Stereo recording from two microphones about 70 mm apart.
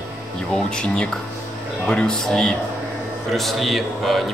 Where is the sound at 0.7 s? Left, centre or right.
Centre.